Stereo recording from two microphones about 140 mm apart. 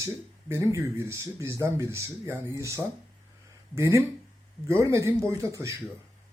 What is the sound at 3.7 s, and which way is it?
A man's voice, 20° right (ahead or behind).